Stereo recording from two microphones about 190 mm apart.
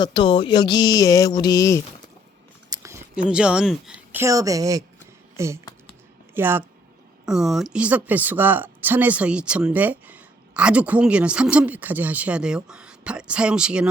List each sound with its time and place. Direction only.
0.0 s speech: 25° left (ahead or behind)
2.6 s a sound: 15° right (ahead or behind)
4.2 s speech: 15° right (ahead or behind)